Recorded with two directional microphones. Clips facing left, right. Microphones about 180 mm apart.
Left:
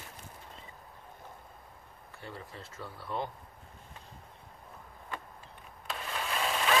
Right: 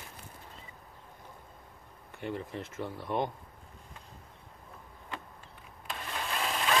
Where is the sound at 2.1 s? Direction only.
20° right (ahead or behind).